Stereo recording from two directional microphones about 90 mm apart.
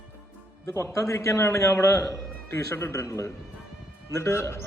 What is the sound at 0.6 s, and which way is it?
A man's voice, 30° left (ahead or behind).